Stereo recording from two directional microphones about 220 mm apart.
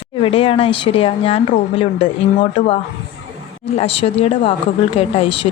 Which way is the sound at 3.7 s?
25° left (ahead or behind).